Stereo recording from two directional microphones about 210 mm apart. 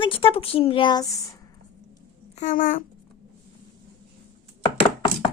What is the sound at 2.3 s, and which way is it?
Speech, 35° left (ahead or behind).